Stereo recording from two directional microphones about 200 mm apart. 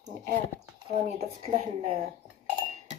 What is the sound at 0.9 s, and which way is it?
A woman's voice, 35° right (ahead or behind).